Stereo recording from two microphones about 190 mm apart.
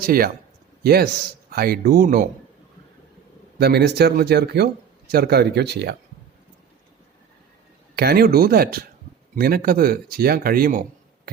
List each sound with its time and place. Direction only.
0.0 s a man's voice: 50° right (ahead or behind)
3.6 s speech: 60° right (ahead or behind)
7.9 s speech: 55° right (ahead or behind)